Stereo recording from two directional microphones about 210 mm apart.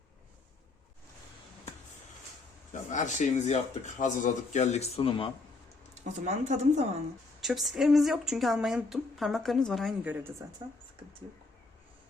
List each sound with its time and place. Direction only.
2.7 s speech: 35° left (ahead or behind)
5.9 s speech: 35° right (ahead or behind)
7.4 s a woman's voice: centre (ahead or behind)